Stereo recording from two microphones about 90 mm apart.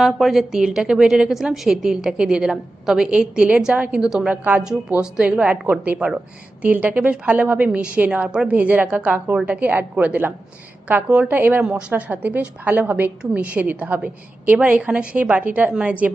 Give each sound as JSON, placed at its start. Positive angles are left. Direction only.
{"t": 0.0, "sound": "a woman's voice", "side_deg": -5}